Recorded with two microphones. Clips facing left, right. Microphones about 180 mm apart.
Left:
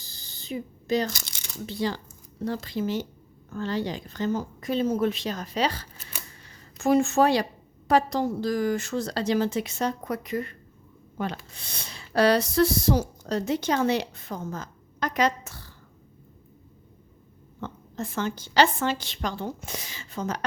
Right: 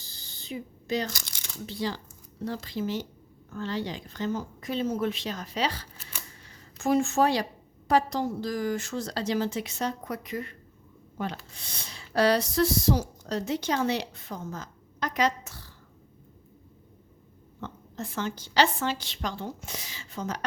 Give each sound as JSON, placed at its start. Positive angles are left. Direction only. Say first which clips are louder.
{"t": 0.0, "sound": "a sound", "louder": "left 1 dB", "side_deg": 40}
{"t": 1.1, "sound": "speech", "louder": "left 1 dB", "side_deg": 20}
{"t": 1.6, "sound": "a woman's voice", "louder": "left 3 dB", "side_deg": 55}
{"t": 6.8, "sound": "a woman's voice", "louder": "left 3 dB", "side_deg": 65}
{"t": 11.5, "sound": "speech", "louder": "left 2 dB", "side_deg": 60}
{"t": 17.6, "sound": "a woman's voice", "louder": "left 3 dB", "side_deg": 50}